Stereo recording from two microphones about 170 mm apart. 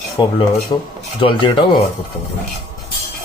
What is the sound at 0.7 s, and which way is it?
Speech, 30° left (ahead or behind).